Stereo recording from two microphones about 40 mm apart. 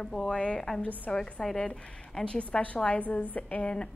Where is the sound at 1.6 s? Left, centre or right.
Left.